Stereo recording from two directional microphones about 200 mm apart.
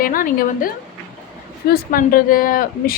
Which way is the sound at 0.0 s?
45° left (ahead or behind).